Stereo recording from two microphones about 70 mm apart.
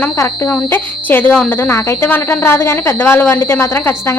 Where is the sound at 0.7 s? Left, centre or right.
Left.